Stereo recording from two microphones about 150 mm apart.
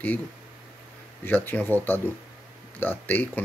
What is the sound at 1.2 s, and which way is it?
Speech, 10° left (ahead or behind).